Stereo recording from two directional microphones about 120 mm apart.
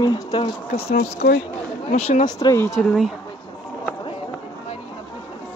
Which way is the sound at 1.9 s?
70° left (ahead or behind).